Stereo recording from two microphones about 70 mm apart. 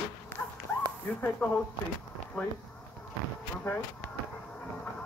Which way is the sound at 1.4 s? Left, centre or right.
Centre.